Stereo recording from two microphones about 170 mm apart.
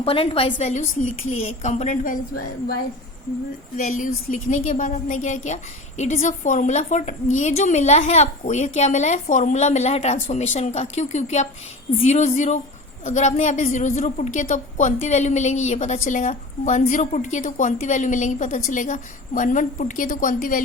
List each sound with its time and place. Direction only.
0.0 s a woman's voice: 35° left (ahead or behind)
3.8 s a woman's voice: 45° left (ahead or behind)